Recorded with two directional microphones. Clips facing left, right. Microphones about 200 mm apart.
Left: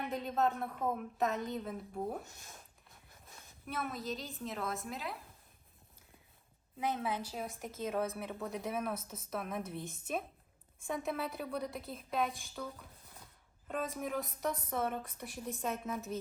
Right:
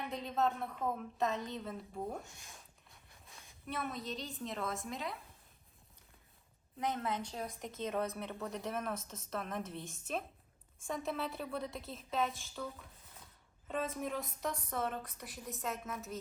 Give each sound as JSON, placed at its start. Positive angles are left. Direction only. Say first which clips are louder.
{"t": 0.1, "sound": "speech", "louder": "left 1 dB", "side_deg": 0}
{"t": 6.7, "sound": "speech", "louder": "left 1 dB", "side_deg": 5}
{"t": 10.8, "sound": "speech", "louder": "left 1 dB", "side_deg": 0}
{"t": 13.7, "sound": "speech", "louder": "even", "side_deg": 0}
{"t": 15.2, "sound": "a woman's voice", "louder": "left 3 dB", "side_deg": 30}